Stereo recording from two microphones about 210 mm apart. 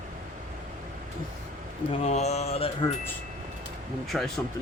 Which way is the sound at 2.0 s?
30° left (ahead or behind).